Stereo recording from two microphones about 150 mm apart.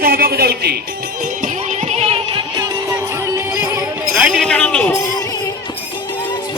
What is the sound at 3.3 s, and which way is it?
Music, 20° right (ahead or behind).